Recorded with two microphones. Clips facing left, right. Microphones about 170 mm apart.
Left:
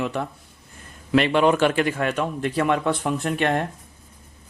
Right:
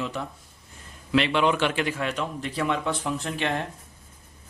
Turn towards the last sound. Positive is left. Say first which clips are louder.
# left 6 dB
turn(degrees=55)  # may be behind; listen again after turning